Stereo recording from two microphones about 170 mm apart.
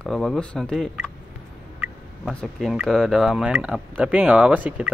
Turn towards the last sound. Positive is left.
turn(degrees=-10)  # may be behind; listen again after turning